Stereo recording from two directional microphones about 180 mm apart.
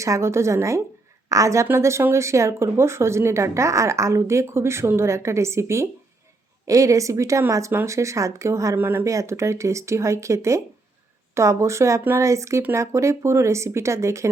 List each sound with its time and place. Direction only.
0.0 s speech: 15° right (ahead or behind)